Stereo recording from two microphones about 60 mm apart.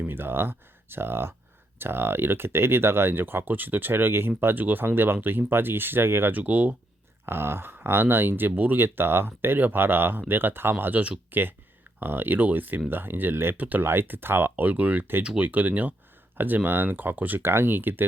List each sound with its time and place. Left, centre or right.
0.1 s speech: right
6.3 s speech: right
7.3 s speech: right